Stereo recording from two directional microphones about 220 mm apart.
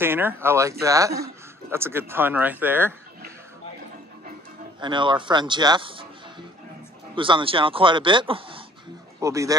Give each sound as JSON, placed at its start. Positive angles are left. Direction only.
{"t": 0.0, "sound": "speech", "side_deg": -10}
{"t": 4.7, "sound": "speech", "side_deg": -20}
{"t": 7.2, "sound": "speech", "side_deg": -20}